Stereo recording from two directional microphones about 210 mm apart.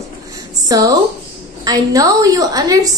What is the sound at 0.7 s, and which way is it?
A woman's voice, 20° right (ahead or behind).